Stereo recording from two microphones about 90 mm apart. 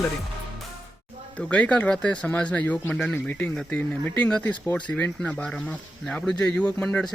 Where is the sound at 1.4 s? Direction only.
15° left (ahead or behind).